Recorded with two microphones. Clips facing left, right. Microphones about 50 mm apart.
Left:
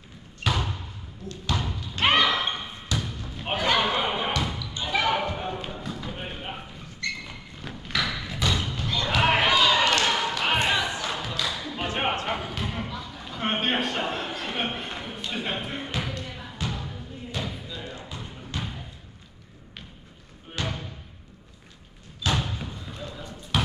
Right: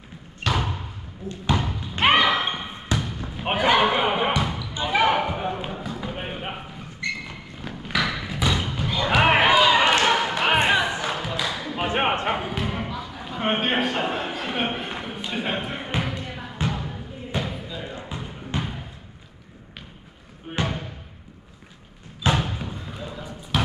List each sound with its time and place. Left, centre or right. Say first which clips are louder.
0.4 s a sound: right 2 dB; right
1.3 s basketball bounce: right 5 dB; right
7.6 s thump: right 3 dB; centre
9.2 s basketball bounce: right 4 dB; right
12.6 s a sound: right 4 dB; centre
15.9 s basketball bounce: right 4 dB; right
20.5 s music: right 5 dB; right
22.2 s thump: right 4 dB; right
22.8 s basketball bounce: right 3 dB; centre
23.5 s clip-clop: right 2 dB; centre